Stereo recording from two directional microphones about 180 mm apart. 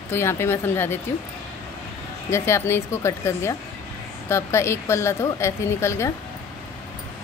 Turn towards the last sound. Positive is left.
turn(degrees=15)  # may be behind; listen again after turning